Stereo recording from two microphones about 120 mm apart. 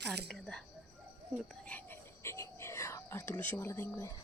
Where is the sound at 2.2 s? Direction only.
25° left (ahead or behind).